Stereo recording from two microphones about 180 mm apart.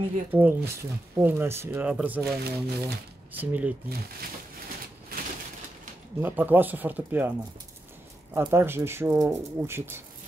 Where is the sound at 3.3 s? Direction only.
10° right (ahead or behind).